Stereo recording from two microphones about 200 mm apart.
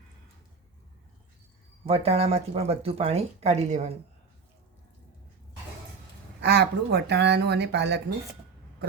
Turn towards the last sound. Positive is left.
turn(degrees=-60)  # may be behind; listen again after turning